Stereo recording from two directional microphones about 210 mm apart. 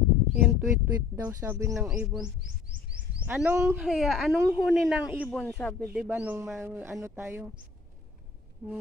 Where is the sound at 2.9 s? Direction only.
5° right (ahead or behind).